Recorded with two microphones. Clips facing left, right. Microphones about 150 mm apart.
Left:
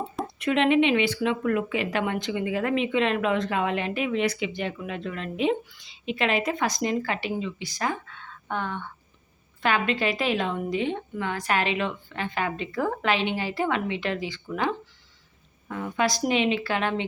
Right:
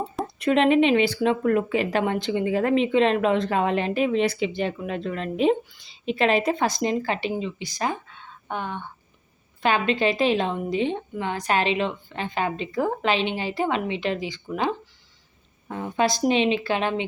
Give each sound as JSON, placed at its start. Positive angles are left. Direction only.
{"t": 0.3, "sound": "a woman's voice", "side_deg": -35}
{"t": 15.7, "sound": "a woman's voice", "side_deg": -25}